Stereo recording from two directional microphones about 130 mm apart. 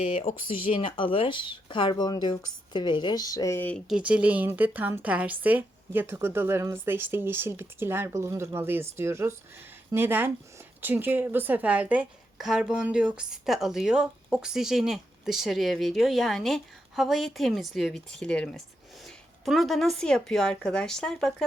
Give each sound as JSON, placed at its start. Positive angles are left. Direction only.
{"t": 0.0, "sound": "speech", "side_deg": 55}
{"t": 3.8, "sound": "a woman's voice", "side_deg": -5}